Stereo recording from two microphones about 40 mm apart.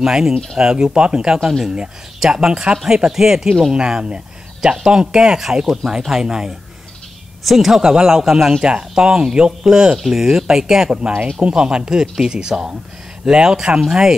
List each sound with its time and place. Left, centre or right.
0.0 s speech: centre
3.1 s speech: centre
7.8 s speech: centre